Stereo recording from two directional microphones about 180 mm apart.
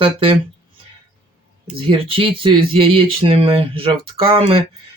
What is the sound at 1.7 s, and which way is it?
Speech, 30° right (ahead or behind).